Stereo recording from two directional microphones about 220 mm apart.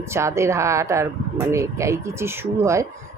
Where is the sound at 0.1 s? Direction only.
10° right (ahead or behind).